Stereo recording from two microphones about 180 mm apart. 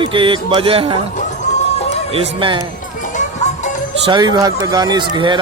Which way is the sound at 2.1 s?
30° right (ahead or behind).